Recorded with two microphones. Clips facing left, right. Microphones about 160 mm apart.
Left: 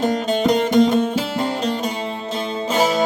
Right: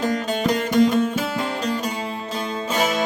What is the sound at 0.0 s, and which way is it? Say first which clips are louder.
Music: left 4 dB; 30° left (ahead or behind).